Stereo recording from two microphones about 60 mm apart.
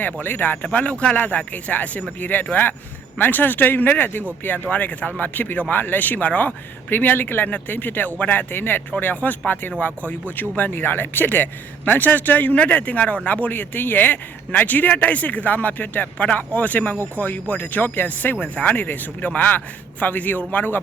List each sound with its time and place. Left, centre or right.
0.0 s a man's voice: left